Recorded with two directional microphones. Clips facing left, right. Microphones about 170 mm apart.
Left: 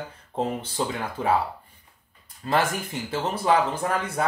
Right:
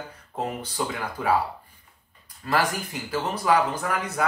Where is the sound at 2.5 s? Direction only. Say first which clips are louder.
Left 1 dB; 25° left (ahead or behind).